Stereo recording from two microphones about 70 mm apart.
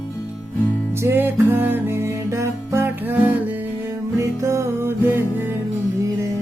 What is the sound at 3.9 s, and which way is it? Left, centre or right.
Music, right.